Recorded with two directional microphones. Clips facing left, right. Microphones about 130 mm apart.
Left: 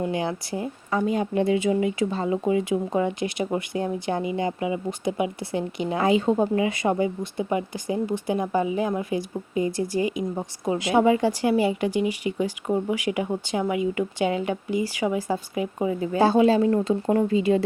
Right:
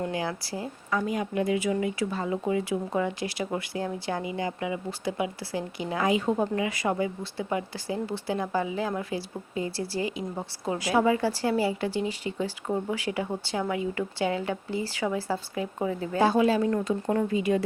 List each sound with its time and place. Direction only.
0.0 s speech: 20° left (ahead or behind)
16.2 s speech: 25° left (ahead or behind)